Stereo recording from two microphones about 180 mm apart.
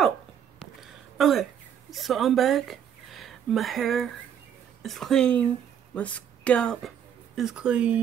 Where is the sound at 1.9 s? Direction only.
Centre (ahead or behind).